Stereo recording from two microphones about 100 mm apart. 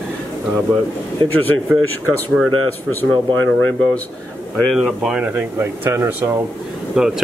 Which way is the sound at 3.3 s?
20° left (ahead or behind).